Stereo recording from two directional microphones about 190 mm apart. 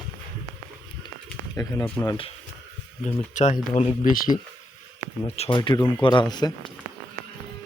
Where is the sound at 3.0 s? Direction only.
40° left (ahead or behind).